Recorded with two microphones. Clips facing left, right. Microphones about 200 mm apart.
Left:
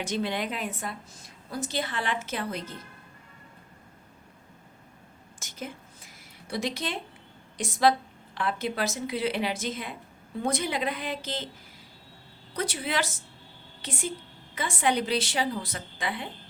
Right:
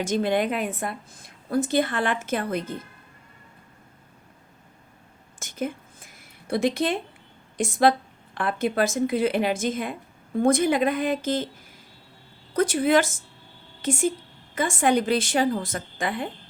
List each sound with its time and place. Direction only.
0.0 s a woman's voice: 50° right (ahead or behind)
5.4 s a sound: 55° right (ahead or behind)
7.6 s a woman's voice: 50° right (ahead or behind)
12.5 s a woman's voice: 50° right (ahead or behind)